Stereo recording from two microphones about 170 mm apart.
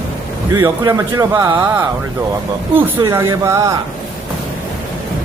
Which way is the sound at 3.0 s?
20° right (ahead or behind).